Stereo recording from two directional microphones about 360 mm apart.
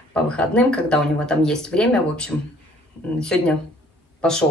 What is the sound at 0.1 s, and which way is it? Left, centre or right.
Speech, centre.